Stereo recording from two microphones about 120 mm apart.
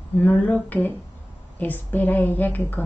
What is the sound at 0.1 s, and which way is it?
A woman's voice, 15° left (ahead or behind).